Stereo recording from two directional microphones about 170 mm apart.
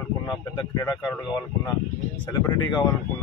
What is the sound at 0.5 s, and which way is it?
Speech, 15° left (ahead or behind).